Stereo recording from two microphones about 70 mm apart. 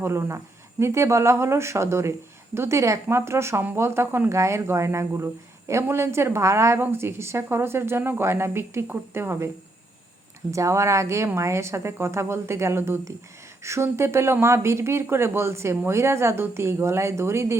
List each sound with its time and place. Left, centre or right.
0.0 s speech: right
10.5 s speech: right